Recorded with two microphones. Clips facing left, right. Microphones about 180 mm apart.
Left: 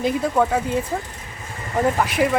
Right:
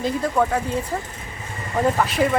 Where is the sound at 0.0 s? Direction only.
10° left (ahead or behind).